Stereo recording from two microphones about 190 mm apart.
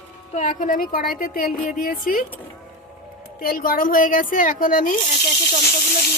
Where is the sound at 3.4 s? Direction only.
50° left (ahead or behind).